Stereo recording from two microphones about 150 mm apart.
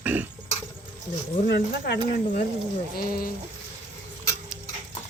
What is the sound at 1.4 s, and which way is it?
Speech, 90° left.